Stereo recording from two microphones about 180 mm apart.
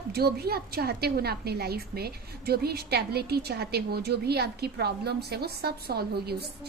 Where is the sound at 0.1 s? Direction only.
60° right (ahead or behind).